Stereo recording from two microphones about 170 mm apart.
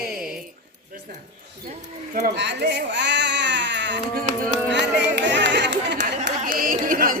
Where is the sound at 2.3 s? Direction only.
90° right.